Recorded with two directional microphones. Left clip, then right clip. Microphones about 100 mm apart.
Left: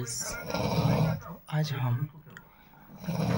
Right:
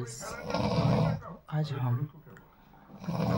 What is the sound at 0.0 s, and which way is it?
Speech, 20° right (ahead or behind).